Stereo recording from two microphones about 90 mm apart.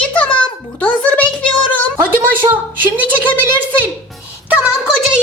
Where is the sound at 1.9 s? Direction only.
25° right (ahead or behind).